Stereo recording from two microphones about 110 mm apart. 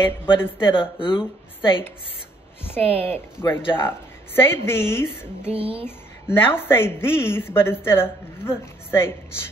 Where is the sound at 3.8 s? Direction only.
20° left (ahead or behind).